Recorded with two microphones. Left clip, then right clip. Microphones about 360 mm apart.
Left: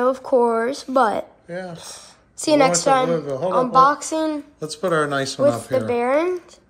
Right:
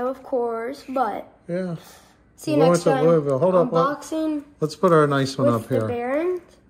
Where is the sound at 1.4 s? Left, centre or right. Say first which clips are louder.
Right 3 dB; centre.